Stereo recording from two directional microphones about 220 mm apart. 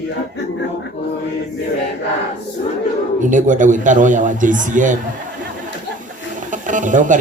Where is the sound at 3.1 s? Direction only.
35° right (ahead or behind).